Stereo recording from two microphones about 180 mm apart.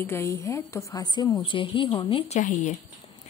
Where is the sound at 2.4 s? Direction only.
40° left (ahead or behind).